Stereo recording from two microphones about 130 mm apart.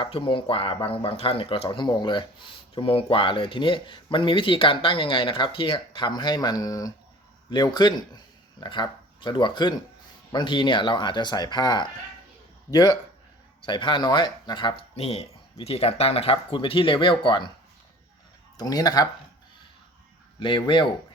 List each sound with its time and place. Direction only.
0.0 s speech: 40° left (ahead or behind)
1.7 s speech: 35° left (ahead or behind)
18.5 s speech: 30° left (ahead or behind)
20.4 s speech: 40° left (ahead or behind)